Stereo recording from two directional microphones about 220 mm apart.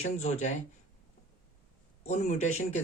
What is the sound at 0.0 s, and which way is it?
Speech, 30° left (ahead or behind).